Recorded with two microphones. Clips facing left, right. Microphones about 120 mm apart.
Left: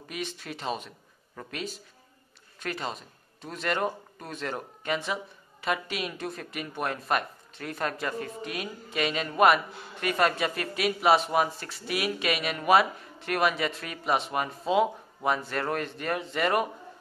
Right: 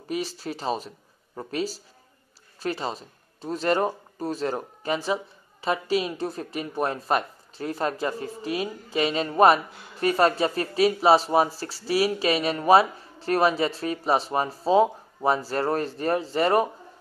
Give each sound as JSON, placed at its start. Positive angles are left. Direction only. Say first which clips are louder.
{"t": 0.1, "sound": "speech", "louder": "right 7 dB", "side_deg": -35}